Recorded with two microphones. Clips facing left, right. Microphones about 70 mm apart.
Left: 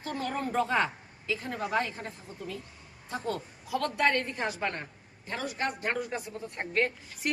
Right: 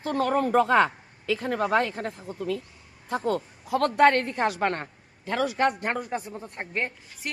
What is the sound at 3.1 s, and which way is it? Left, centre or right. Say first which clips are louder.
A woman's voice: right 7 dB; right.